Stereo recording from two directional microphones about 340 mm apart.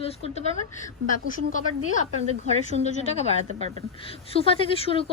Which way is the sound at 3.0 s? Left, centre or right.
Centre.